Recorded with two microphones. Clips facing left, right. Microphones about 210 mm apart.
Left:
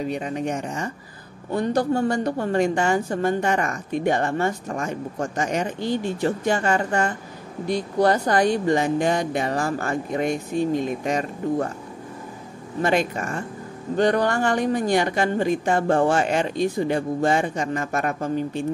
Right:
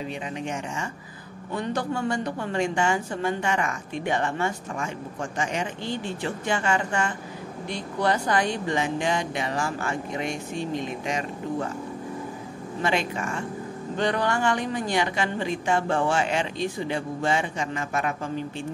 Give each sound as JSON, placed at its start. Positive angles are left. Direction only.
{"t": 0.0, "sound": "a woman's voice", "side_deg": 45}
{"t": 12.8, "sound": "a woman's voice", "side_deg": 45}